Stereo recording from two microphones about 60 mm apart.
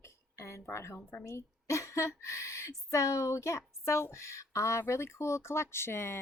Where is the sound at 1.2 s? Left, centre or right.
Left.